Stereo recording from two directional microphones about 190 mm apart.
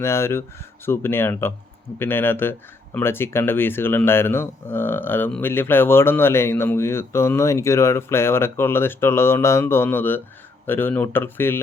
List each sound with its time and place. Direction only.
0.0 s speech: 15° left (ahead or behind)